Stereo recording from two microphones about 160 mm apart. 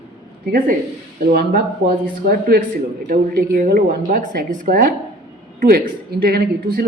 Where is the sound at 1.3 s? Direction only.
80° right.